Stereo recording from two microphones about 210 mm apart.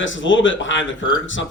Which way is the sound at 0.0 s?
60° left (ahead or behind).